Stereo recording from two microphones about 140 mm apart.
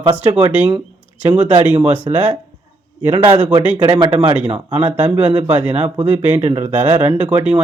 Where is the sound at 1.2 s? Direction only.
10° right (ahead or behind).